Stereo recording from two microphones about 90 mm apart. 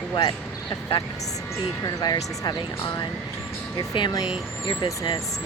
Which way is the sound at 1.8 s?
45° left (ahead or behind).